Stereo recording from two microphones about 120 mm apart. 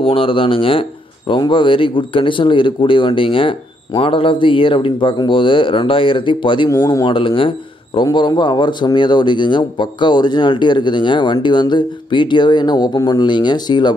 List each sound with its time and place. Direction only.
0.0 s speech: 50° left (ahead or behind)
6.7 s speech: 25° left (ahead or behind)
7.1 s speech: 45° left (ahead or behind)